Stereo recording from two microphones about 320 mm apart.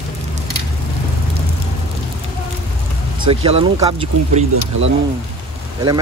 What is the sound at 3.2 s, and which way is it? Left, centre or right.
Speech, centre.